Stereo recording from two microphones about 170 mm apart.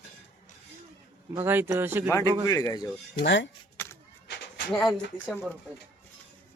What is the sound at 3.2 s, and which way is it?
Speech, 90° left.